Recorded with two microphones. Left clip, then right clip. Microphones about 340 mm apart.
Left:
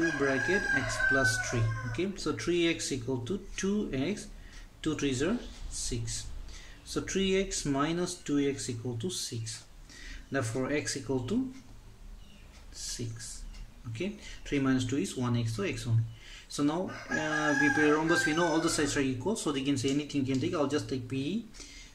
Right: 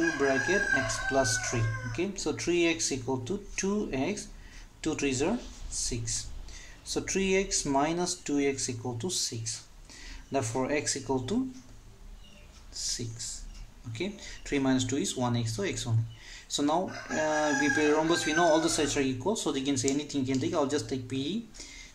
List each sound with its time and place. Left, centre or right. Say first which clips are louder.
0.5 s speech: right 2 dB; centre
12.7 s speech: right 5 dB; centre